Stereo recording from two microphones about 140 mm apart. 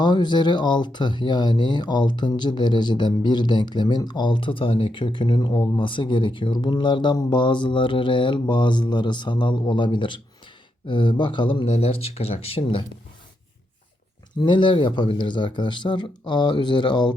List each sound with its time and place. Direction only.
0.0 s speech: 30° left (ahead or behind)
14.4 s speech: 35° left (ahead or behind)